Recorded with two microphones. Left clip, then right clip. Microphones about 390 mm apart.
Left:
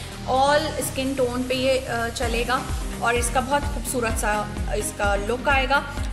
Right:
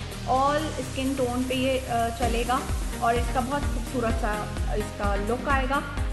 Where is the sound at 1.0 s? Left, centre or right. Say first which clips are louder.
Left 2 dB; left.